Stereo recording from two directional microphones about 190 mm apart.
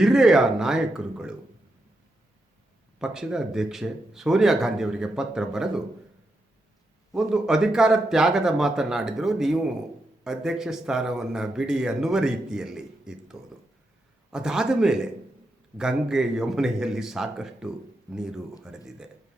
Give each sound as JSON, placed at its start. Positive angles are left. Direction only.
{"t": 0.0, "sound": "speech", "side_deg": -5}
{"t": 3.0, "sound": "speech", "side_deg": -5}
{"t": 7.1, "sound": "speech", "side_deg": -5}